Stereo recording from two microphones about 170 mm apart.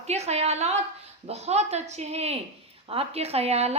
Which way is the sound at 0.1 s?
40° right (ahead or behind).